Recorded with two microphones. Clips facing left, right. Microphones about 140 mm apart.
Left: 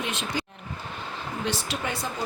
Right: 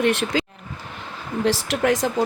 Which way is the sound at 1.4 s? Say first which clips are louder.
Right 11 dB; 80° right.